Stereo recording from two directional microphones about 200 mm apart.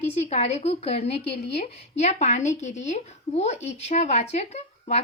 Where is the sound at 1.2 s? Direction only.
55° left (ahead or behind).